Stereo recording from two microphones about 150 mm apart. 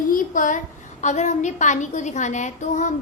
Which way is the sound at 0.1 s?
60° left (ahead or behind).